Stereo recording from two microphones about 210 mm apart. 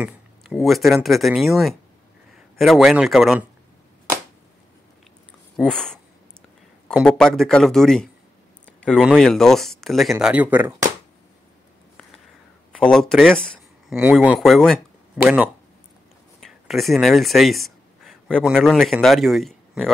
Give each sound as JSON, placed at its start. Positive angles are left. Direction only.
{"t": 0.0, "sound": "speech", "side_deg": 0}
{"t": 5.7, "sound": "speech", "side_deg": 5}
{"t": 12.7, "sound": "speech", "side_deg": 0}